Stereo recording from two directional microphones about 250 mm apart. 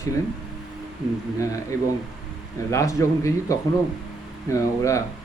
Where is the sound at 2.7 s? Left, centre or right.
Centre.